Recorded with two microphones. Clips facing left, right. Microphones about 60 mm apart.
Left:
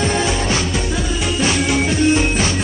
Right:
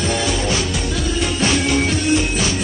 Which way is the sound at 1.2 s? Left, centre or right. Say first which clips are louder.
Even; centre.